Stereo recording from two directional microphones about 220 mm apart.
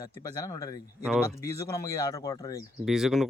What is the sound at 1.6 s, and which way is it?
Speech, 15° left (ahead or behind).